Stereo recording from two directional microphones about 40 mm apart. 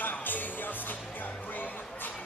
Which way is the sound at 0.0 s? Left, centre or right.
Left.